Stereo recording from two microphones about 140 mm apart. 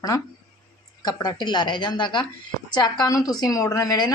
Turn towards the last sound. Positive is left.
turn(degrees=25)  # may be behind; listen again after turning